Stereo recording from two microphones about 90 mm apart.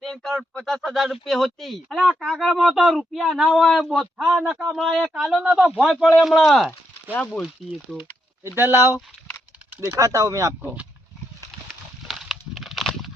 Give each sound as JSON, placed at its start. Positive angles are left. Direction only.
{"t": 0.0, "sound": "speech", "side_deg": 5}
{"t": 8.5, "sound": "speech", "side_deg": -25}
{"t": 9.6, "sound": "typing", "side_deg": -25}
{"t": 10.0, "sound": "speech", "side_deg": -40}
{"t": 10.6, "sound": "speech", "side_deg": -20}
{"t": 12.0, "sound": "a sound", "side_deg": 0}